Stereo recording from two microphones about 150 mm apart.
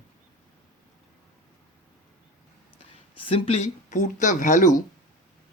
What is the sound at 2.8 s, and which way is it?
Speech, 35° left (ahead or behind).